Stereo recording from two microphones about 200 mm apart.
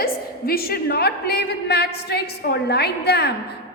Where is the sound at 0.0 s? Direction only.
50° left (ahead or behind).